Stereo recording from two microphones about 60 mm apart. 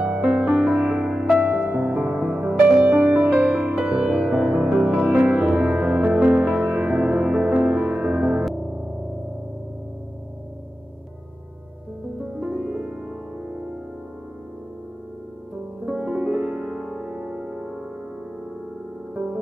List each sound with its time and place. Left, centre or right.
0.0 s music: centre
12.4 s music: right
15.8 s music: centre
17.0 s keyboard: centre